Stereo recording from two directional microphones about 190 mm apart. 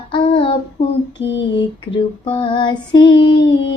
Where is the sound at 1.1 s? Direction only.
70° left (ahead or behind).